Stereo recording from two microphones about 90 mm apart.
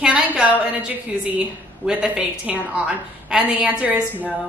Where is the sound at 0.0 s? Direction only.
10° right (ahead or behind).